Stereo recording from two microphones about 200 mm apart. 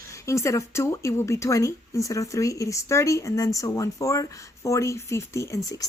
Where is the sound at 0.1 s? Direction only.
15° left (ahead or behind).